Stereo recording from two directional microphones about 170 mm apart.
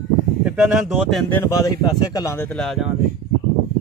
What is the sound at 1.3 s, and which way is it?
Speech, 20° left (ahead or behind).